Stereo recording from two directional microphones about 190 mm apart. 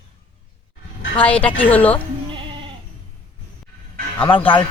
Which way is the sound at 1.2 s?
5° left (ahead or behind).